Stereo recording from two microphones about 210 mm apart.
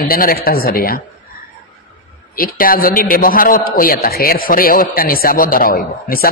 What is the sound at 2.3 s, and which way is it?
A man's voice, 45° left (ahead or behind).